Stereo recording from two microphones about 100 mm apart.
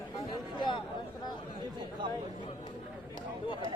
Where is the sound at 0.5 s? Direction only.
50° left (ahead or behind).